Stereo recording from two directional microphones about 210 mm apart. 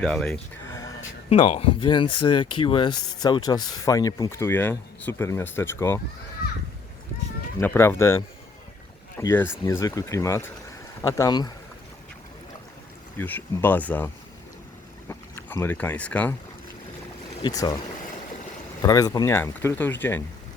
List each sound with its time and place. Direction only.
0.0 s speech: centre (ahead or behind)
0.7 s a sound: 15° left (ahead or behind)
1.3 s speech: 30° left (ahead or behind); by 6.0 s 10° left (ahead or behind)
7.6 s speech: 10° left (ahead or behind)
13.1 s speech: 10° left (ahead or behind)
15.1 s speech: 10° left (ahead or behind)
17.4 s speech: 15° left (ahead or behind)
18.8 s speech: 15° left (ahead or behind)